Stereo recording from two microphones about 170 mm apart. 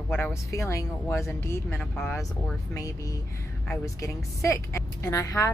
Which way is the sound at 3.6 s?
20° left (ahead or behind).